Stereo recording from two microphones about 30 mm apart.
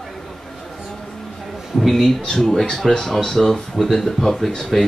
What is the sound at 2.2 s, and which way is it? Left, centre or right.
Speech, centre.